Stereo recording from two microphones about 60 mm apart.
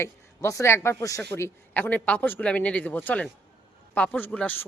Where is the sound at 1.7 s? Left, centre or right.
Left.